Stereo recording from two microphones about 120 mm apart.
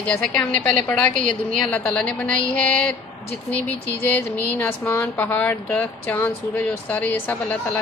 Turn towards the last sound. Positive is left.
turn(degrees=15)  # may be behind; listen again after turning